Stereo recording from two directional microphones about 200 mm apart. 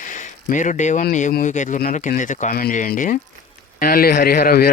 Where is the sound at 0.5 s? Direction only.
40° left (ahead or behind).